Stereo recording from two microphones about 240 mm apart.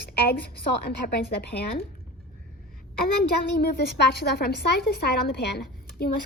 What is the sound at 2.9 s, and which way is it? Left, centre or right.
A woman's voice, left.